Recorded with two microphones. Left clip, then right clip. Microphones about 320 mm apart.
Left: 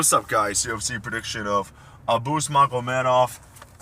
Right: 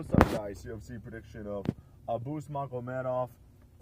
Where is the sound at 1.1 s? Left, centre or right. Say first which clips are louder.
Left 15 dB; right.